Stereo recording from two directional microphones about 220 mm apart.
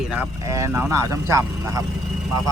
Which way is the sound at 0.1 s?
10° right (ahead or behind).